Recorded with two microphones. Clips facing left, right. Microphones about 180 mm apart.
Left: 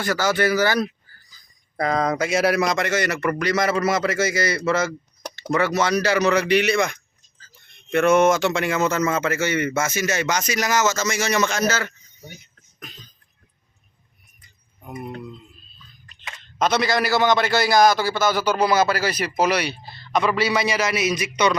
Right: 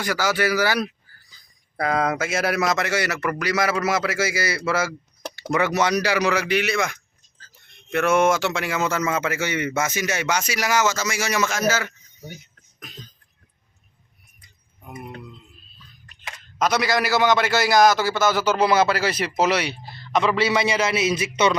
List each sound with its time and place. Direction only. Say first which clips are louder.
0.0 s a man's voice: left 2 dB; 10° right (ahead or behind)
16.6 s a man's voice: left 1 dB; 25° left (ahead or behind)
18.6 s a man's voice: even; 25° right (ahead or behind)